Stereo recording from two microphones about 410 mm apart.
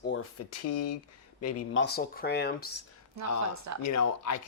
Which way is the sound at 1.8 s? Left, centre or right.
Left.